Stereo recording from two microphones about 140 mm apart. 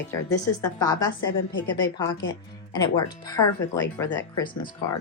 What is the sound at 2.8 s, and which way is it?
Speech, 25° left (ahead or behind).